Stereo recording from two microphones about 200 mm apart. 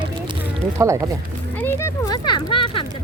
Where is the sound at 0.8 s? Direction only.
15° right (ahead or behind).